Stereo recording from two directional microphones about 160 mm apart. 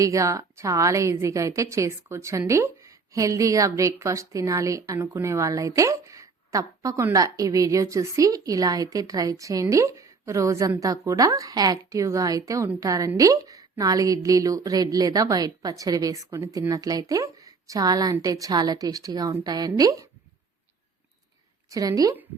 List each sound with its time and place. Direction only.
0.0 s a woman's voice: 20° right (ahead or behind)
21.7 s a woman's voice: 20° right (ahead or behind)